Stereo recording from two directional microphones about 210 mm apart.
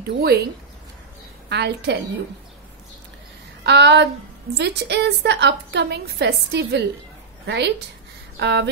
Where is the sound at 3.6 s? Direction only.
55° right (ahead or behind).